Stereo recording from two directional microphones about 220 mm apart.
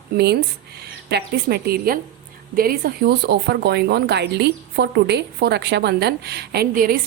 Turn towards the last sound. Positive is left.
turn(degrees=-40)  # may be behind; listen again after turning